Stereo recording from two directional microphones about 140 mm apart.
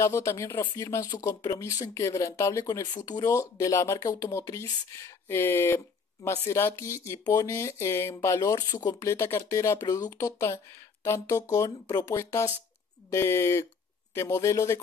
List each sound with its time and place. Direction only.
0.0 s speech: 20° left (ahead or behind)